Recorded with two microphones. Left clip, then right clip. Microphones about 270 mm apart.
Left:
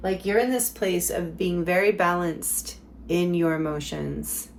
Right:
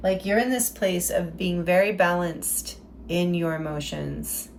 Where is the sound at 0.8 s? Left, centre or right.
Left.